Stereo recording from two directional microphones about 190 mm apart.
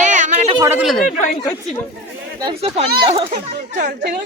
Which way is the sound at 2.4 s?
25° right (ahead or behind).